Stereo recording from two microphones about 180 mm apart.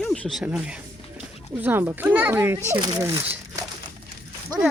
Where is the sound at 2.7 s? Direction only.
25° right (ahead or behind).